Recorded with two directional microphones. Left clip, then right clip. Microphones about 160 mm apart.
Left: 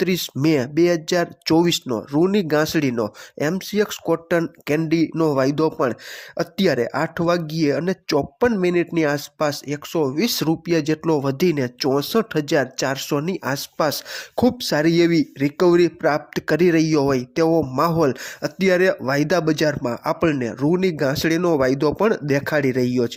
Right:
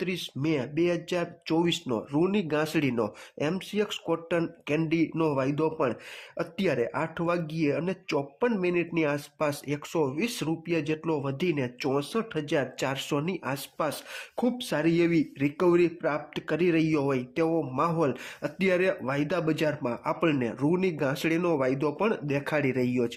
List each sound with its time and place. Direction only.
0.0 s speech: 45° left (ahead or behind)
1.9 s speech: 25° left (ahead or behind)
10.2 s speech: 40° left (ahead or behind)